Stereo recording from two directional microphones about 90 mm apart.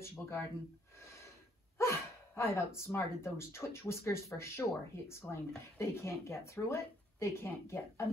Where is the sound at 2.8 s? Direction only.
30° left (ahead or behind).